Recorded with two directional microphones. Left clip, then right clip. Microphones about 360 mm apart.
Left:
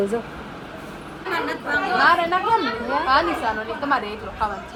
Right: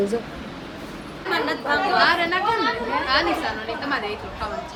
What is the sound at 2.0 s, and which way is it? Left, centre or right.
A woman's voice, centre.